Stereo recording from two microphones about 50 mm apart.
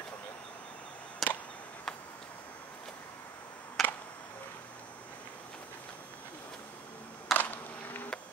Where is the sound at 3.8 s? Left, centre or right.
Centre.